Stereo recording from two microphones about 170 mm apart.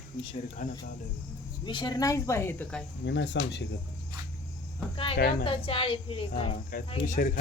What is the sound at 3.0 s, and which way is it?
Speech, 90° left.